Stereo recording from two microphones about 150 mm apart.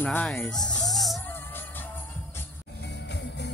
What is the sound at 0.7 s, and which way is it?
Music, centre (ahead or behind).